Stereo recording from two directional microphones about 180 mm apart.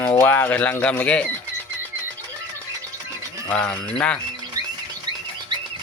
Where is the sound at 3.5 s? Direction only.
5° left (ahead or behind).